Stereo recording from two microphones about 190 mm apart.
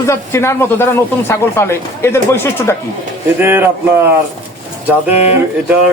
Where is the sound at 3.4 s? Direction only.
10° right (ahead or behind).